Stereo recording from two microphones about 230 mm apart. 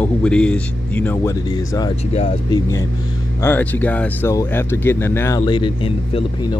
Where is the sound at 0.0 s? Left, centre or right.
Centre; by 2.6 s left.